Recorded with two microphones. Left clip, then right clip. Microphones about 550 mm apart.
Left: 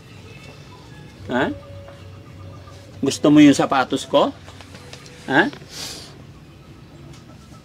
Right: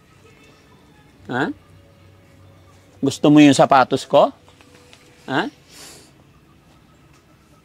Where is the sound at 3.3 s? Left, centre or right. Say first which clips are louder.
Right 3 dB; right.